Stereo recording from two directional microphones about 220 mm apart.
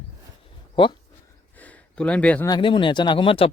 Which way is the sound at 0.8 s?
20° left (ahead or behind).